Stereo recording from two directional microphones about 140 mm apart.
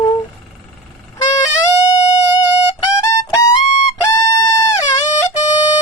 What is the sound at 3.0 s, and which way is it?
Music, 20° left (ahead or behind).